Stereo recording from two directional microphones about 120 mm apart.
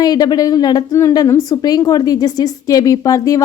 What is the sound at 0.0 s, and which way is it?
A woman's voice, 35° left (ahead or behind).